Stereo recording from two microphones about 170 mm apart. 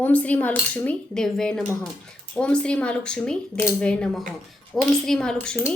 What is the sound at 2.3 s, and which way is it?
Speech, 5° left (ahead or behind).